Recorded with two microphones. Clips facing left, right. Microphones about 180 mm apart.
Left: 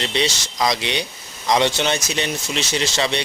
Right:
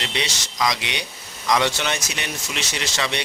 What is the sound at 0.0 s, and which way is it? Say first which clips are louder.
A man's voice: left 6 dB; 30° left (ahead or behind).